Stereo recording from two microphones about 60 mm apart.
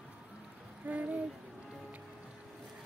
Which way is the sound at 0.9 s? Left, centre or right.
Right.